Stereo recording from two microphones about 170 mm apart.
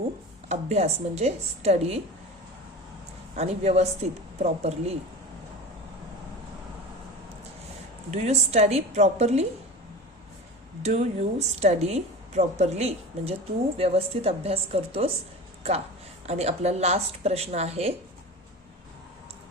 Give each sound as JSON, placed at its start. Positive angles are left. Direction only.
{"t": 0.4, "sound": "a woman's voice", "side_deg": -40}
{"t": 3.3, "sound": "a woman's voice", "side_deg": -40}
{"t": 8.1, "sound": "a woman's voice", "side_deg": -40}
{"t": 10.8, "sound": "a woman's voice", "side_deg": -40}